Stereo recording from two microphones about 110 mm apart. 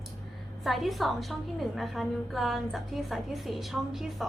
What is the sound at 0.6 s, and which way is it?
A woman's voice, centre (ahead or behind).